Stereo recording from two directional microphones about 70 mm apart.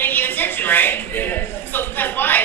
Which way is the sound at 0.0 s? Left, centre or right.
Left.